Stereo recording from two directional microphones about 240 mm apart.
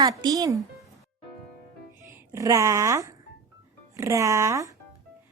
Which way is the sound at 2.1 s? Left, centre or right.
Centre.